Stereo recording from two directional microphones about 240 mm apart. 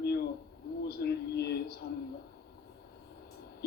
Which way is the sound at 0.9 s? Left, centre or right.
Left.